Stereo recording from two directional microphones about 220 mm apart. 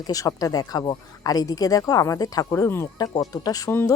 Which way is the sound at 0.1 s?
15° left (ahead or behind).